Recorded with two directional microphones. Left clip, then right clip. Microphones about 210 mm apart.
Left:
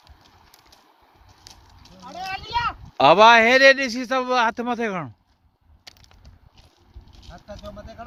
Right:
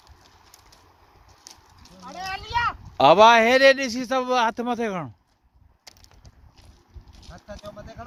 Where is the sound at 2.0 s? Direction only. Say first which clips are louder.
Left 1 dB; centre (ahead or behind).